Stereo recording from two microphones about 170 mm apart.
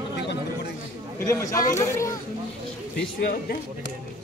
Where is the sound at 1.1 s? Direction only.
15° left (ahead or behind).